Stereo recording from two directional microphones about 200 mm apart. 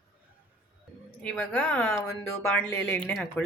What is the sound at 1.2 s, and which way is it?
Speech, 5° left (ahead or behind).